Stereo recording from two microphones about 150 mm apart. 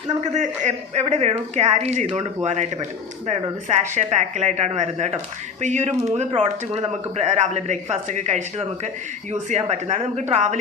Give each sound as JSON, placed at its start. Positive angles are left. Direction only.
{"t": 0.3, "sound": "speech", "side_deg": -50}
{"t": 3.7, "sound": "speech", "side_deg": -50}
{"t": 6.1, "sound": "speech", "side_deg": -45}